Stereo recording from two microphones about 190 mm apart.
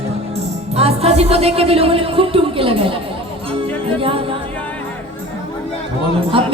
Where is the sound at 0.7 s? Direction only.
30° right (ahead or behind).